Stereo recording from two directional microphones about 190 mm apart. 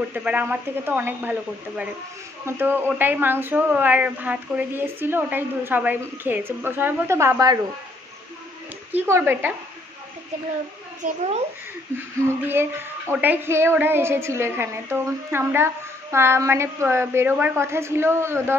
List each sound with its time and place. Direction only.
0.1 s a woman's voice: 10° right (ahead or behind)
2.4 s a woman's voice: 10° right (ahead or behind)
8.9 s a woman's voice: 10° right (ahead or behind)
11.0 s a child's voice: 35° right (ahead or behind)
12.2 s a woman's voice: 10° right (ahead or behind)